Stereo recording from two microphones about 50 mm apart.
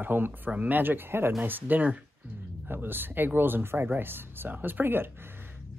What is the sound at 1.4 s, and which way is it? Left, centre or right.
Speech, right.